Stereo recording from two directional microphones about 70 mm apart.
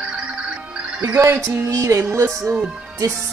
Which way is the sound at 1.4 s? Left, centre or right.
Right.